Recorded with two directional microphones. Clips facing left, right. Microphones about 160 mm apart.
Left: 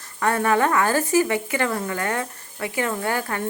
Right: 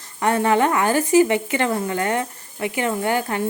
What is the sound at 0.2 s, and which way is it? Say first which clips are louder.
Speech: right 2 dB; 20° right (ahead or behind).